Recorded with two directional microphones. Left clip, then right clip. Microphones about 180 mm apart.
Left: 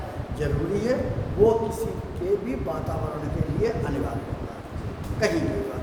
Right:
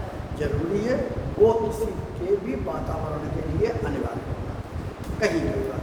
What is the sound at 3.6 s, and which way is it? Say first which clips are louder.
Speech: right 1 dB; 35° left (ahead or behind).